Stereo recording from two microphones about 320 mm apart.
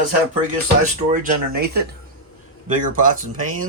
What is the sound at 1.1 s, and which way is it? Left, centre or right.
Speech, right.